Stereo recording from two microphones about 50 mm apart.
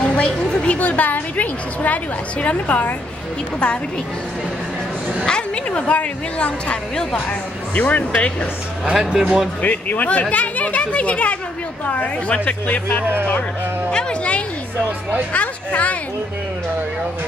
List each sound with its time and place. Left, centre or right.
0.0 s a woman's voice: centre
5.2 s a woman's voice: centre
8.9 s speech: centre
9.6 s a woman's voice: left
13.8 s a woman's voice: centre